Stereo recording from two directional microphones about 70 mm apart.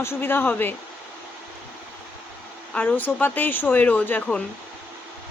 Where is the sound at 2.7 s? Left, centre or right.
Left.